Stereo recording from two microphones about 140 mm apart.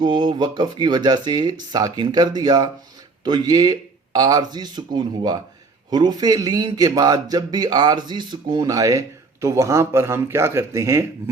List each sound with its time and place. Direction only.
0.0 s a man's voice: 35° right (ahead or behind)